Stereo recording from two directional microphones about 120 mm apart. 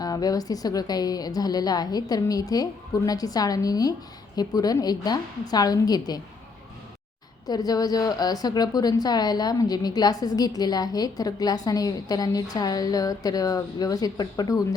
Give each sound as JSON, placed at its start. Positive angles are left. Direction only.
{"t": 0.0, "sound": "a woman's voice", "side_deg": 30}
{"t": 7.4, "sound": "a woman's voice", "side_deg": 30}